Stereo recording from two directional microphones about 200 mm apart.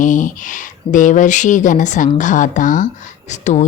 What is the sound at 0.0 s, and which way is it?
Speech, 40° left (ahead or behind).